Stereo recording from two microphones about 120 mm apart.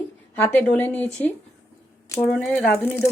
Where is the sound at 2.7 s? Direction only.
15° left (ahead or behind).